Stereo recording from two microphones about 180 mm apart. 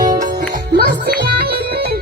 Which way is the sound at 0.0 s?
50° right (ahead or behind).